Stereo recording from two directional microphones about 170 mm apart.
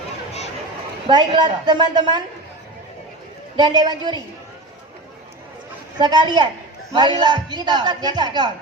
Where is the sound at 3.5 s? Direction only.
25° right (ahead or behind).